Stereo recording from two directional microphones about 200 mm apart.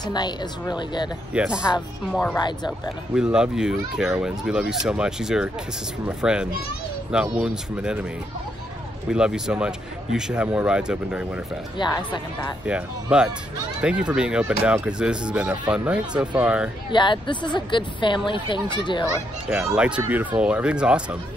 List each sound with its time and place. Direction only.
0.0 s speech: 20° left (ahead or behind)
1.3 s speech: 5° right (ahead or behind)
2.3 s speech: 20° left (ahead or behind)
3.2 s speech: 5° right (ahead or behind)
9.1 s speech: 5° right (ahead or behind)
11.8 s speech: 20° left (ahead or behind)
12.6 s speech: 5° right (ahead or behind)
16.9 s speech: 25° left (ahead or behind)
19.5 s speech: 5° right (ahead or behind)